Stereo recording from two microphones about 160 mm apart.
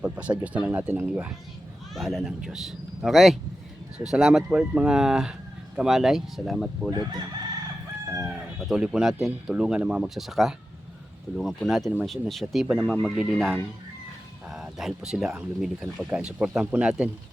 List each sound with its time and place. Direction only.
0.0 s speech: 10° right (ahead or behind)
6.9 s chicken: 25° right (ahead or behind)
8.3 s speech: 5° right (ahead or behind)